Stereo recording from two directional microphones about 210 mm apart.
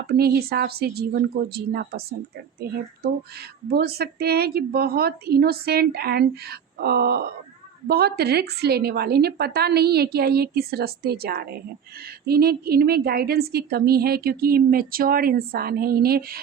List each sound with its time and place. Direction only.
0.1 s a woman's voice: 50° right (ahead or behind)
3.7 s a woman's voice: 50° right (ahead or behind)